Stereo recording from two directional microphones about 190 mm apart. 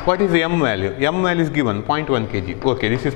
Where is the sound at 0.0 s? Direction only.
15° left (ahead or behind).